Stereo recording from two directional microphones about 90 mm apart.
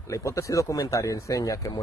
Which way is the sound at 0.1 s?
35° left (ahead or behind).